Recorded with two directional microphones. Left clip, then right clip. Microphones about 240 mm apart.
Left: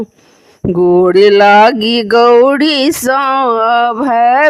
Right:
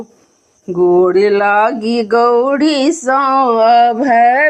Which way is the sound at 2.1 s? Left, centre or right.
Left.